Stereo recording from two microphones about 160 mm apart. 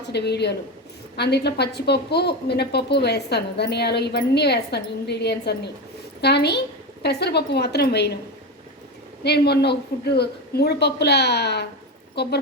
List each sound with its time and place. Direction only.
0.0 s a woman's voice: 90° left
9.2 s a woman's voice: 90° left